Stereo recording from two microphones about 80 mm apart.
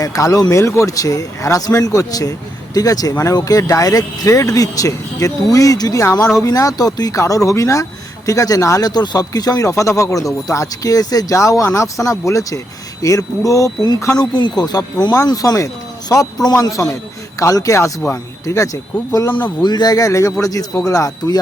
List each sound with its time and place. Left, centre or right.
0.0 s speech: left
6.0 s speech: left
8.9 s speech: left
14.2 s speech: left
19.3 s speech: left